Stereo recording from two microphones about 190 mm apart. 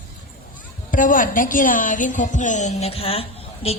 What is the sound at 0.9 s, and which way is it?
A woman's voice, 45° left (ahead or behind).